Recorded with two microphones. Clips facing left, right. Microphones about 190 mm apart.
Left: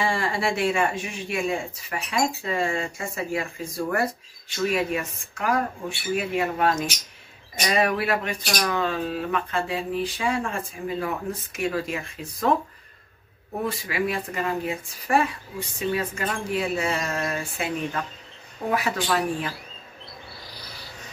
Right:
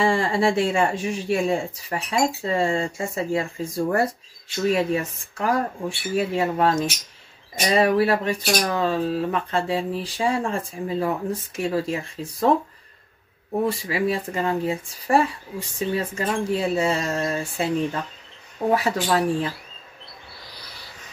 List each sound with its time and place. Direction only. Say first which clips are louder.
0.0 s speech: right 5 dB; 30° right (ahead or behind)
4.6 s speech: right 4 dB; 30° right (ahead or behind)
13.7 s speech: right 1 dB; 30° right (ahead or behind)